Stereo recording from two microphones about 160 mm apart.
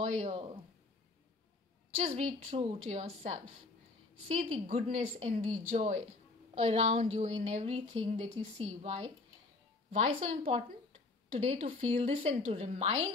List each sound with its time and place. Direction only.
0.0 s speech: 40° right (ahead or behind)
2.0 s a woman's voice: 40° right (ahead or behind)
4.4 s a woman's voice: 45° right (ahead or behind)